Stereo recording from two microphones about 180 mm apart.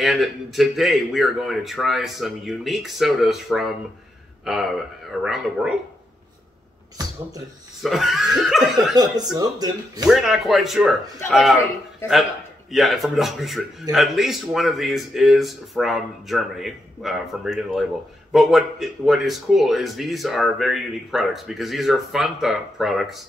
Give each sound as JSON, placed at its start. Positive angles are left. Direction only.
{"t": 0.0, "sound": "speech", "side_deg": 0}
{"t": 7.8, "sound": "speech", "side_deg": 0}
{"t": 8.9, "sound": "speech", "side_deg": -20}
{"t": 10.0, "sound": "speech", "side_deg": 0}
{"t": 12.7, "sound": "speech", "side_deg": 0}